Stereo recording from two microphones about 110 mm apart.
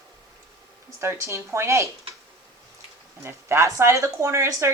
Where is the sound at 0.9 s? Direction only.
25° right (ahead or behind).